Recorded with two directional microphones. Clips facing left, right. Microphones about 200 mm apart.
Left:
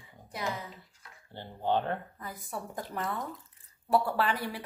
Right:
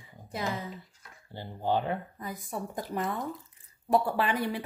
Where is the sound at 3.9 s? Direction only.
15° right (ahead or behind).